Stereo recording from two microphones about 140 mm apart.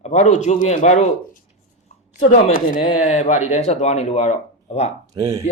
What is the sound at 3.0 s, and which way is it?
Speech, 55° left (ahead or behind).